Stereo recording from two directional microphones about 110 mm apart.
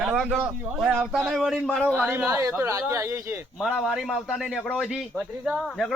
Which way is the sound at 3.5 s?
Centre (ahead or behind).